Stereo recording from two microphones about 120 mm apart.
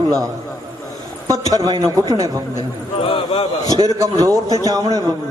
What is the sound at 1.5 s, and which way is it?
Speech, 30° right (ahead or behind).